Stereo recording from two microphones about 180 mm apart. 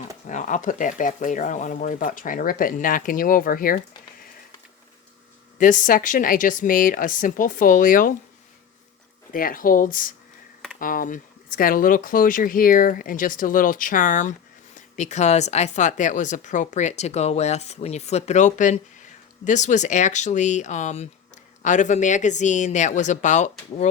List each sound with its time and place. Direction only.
0.3 s speech: 45° left (ahead or behind)
5.5 s speech: 45° left (ahead or behind)
9.3 s speech: 50° left (ahead or behind)